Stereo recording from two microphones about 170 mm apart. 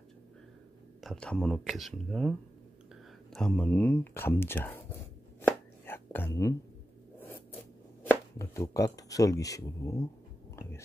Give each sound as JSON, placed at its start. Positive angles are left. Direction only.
{"t": 1.0, "sound": "speech", "side_deg": 5}
{"t": 3.3, "sound": "speech", "side_deg": 5}
{"t": 5.9, "sound": "whispering", "side_deg": 15}
{"t": 7.2, "sound": "a sound", "side_deg": 10}